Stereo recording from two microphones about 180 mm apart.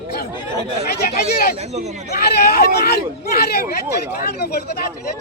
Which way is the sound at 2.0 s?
65° left (ahead or behind).